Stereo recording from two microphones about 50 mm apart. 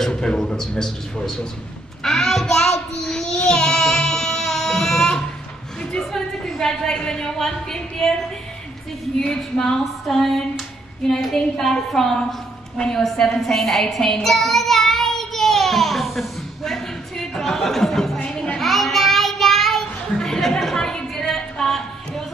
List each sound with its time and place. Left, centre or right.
0.0 s a man's voice: centre
2.0 s child singing: centre
5.8 s a woman's voice: centre
9.2 s a man's voice: centre
10.0 s female singing: centre
11.2 s a man's voice: centre
13.0 s child singing: centre
18.2 s a sound: left
18.6 s child singing: centre